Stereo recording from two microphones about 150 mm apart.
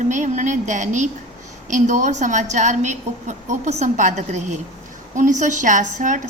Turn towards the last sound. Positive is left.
turn(degrees=-55)  # may be behind; listen again after turning